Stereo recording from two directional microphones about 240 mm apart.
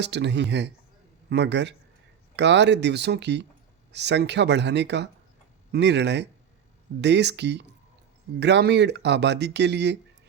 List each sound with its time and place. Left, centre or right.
0.0 s speech: right